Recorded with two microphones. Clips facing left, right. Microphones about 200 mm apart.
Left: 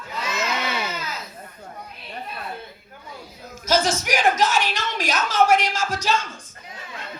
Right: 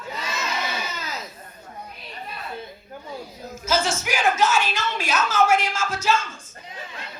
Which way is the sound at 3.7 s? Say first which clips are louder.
Left 3 dB; 40° left (ahead or behind).